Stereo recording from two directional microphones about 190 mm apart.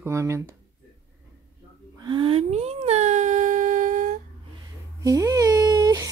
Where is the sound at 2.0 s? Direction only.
25° right (ahead or behind); by 4.2 s 40° right (ahead or behind).